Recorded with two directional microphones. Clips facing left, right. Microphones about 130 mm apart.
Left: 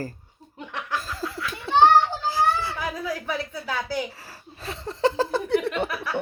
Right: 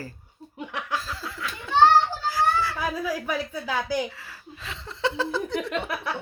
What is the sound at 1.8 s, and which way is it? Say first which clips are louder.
Children playing: left 1 dB; 25° left (ahead or behind).